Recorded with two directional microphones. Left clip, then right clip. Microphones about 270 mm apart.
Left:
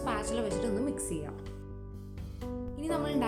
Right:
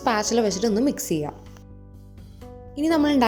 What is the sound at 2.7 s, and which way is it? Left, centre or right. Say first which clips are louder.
Speech: right 12 dB; right.